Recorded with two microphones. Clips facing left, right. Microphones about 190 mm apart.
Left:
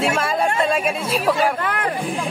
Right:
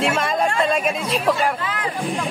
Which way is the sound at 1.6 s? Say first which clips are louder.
Left 3 dB; 55° left (ahead or behind).